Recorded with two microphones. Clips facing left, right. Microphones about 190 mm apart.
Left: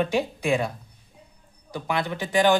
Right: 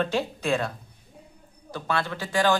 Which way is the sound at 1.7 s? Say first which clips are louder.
Left 1 dB; 15° left (ahead or behind).